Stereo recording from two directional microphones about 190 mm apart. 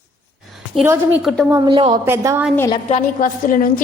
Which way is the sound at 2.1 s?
15° right (ahead or behind).